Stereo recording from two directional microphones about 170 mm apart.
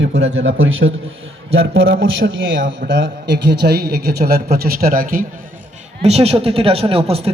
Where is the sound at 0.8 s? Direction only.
65° right (ahead or behind).